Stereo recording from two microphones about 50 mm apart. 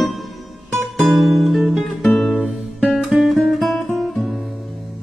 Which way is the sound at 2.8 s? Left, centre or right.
Centre.